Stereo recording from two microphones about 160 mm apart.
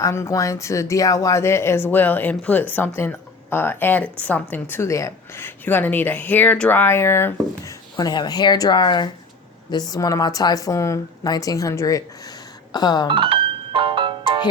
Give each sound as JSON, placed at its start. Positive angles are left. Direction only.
{"t": 0.0, "sound": "a woman's voice", "side_deg": 20}
{"t": 13.1, "sound": "music", "side_deg": -30}